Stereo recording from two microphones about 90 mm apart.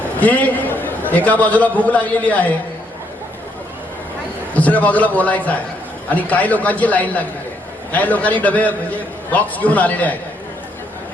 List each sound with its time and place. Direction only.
0.2 s a man's voice: 15° left (ahead or behind)
4.5 s a man's voice: 15° left (ahead or behind)